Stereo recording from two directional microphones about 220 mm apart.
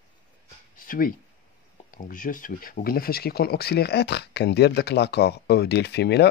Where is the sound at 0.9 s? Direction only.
40° left (ahead or behind).